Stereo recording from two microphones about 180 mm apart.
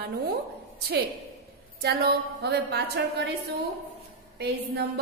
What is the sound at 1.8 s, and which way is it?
A woman's voice, 60° right (ahead or behind).